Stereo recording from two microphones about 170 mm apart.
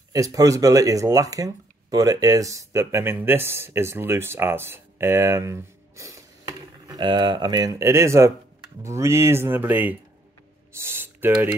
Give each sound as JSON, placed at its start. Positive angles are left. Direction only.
{"t": 0.1, "sound": "speech", "side_deg": -20}